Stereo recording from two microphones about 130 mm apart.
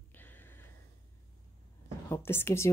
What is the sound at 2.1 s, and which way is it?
Speech, 20° left (ahead or behind).